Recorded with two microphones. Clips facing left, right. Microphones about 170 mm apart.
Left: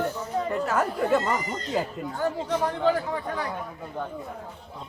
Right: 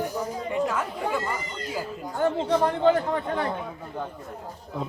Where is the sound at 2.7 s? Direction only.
20° right (ahead or behind).